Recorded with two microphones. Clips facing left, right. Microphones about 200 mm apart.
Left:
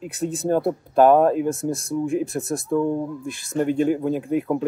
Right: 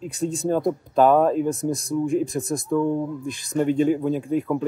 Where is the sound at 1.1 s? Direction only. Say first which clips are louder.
Left 2 dB; 10° left (ahead or behind).